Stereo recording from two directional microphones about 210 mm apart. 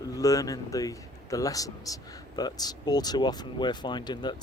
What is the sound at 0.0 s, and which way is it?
Speech, 15° left (ahead or behind).